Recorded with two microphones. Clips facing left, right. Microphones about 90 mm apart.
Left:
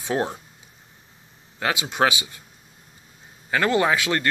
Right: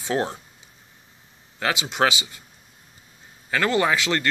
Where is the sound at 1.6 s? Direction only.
5° left (ahead or behind).